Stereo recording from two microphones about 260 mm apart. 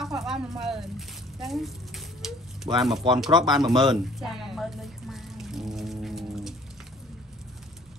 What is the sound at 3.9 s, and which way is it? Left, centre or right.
Pour, centre.